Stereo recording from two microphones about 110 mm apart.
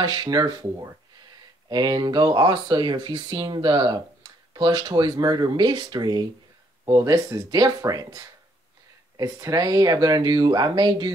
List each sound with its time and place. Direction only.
0.0 s speech: 40° right (ahead or behind)
1.7 s speech: 40° right (ahead or behind)
6.9 s speech: 30° right (ahead or behind)